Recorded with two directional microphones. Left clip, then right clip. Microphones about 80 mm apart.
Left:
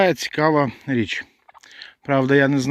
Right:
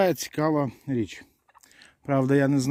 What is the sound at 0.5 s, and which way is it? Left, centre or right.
Speech, centre.